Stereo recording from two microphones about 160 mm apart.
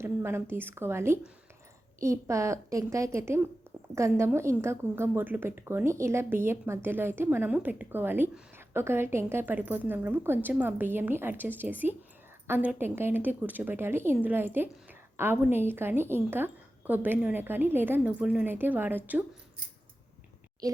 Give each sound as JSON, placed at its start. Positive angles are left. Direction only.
{"t": 0.0, "sound": "a woman's voice", "side_deg": -15}